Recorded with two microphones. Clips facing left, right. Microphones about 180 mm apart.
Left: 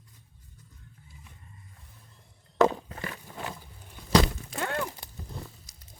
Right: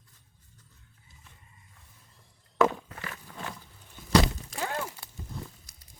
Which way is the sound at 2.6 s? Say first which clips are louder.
Left 2 dB; 35° left (ahead or behind).